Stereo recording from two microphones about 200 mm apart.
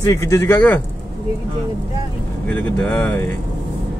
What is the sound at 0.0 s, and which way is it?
Speech, 15° left (ahead or behind).